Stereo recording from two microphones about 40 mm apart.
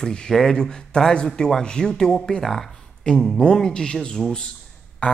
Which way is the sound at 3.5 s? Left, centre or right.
Centre.